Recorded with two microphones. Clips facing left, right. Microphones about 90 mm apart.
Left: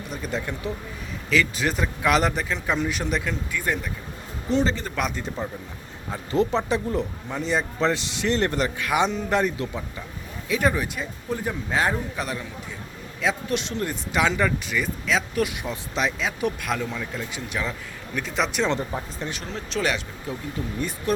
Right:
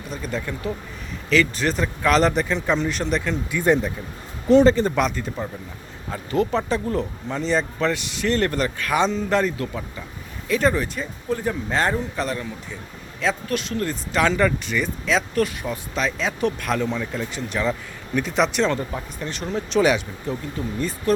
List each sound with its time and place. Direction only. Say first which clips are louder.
0.1 s speech: right 2 dB; 20° left (ahead or behind)
1.3 s speech: right 3 dB; 5° left (ahead or behind)
3.5 s speech: right 10 dB; 25° right (ahead or behind)
4.8 s speech: right 13 dB; 40° right (ahead or behind)
6.3 s speech: right 1 dB; 20° left (ahead or behind)
13.5 s speech: right 2 dB; 20° left (ahead or behind); by 15.4 s 5° left (ahead or behind)
15.4 s speech: right 2 dB; 20° left (ahead or behind); by 18.7 s centre (ahead or behind)
18.7 s speech: right 1 dB; 15° left (ahead or behind)
19.4 s speech: right 9 dB; 5° right (ahead or behind)